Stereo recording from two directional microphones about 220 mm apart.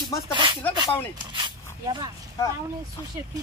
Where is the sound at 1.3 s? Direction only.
20° right (ahead or behind).